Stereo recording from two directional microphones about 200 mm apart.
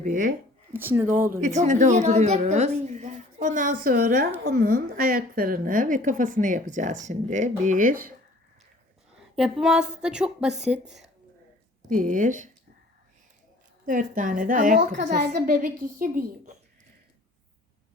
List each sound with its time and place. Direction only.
0.0 s a woman's voice: 40° right (ahead or behind)
0.7 s speech: 10° right (ahead or behind)
1.4 s a woman's voice: 35° right (ahead or behind)
9.3 s a woman's voice: 5° right (ahead or behind)
11.9 s a woman's voice: 40° right (ahead or behind)
13.8 s a child's voice: 40° right (ahead or behind)